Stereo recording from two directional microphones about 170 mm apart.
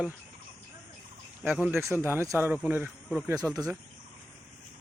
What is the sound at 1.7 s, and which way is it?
Speech, 15° right (ahead or behind).